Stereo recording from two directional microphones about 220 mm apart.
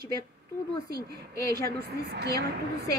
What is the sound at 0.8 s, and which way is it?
A woman's voice, 45° right (ahead or behind).